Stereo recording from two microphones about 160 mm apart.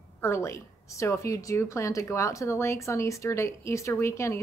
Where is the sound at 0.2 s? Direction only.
15° left (ahead or behind).